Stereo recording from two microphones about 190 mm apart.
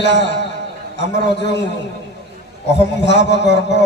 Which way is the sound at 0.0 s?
65° left (ahead or behind).